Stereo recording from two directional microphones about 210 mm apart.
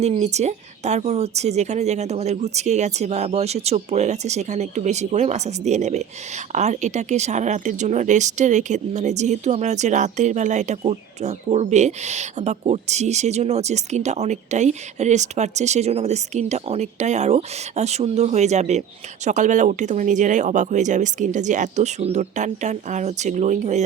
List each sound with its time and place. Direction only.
0.0 s speech: 30° right (ahead or behind)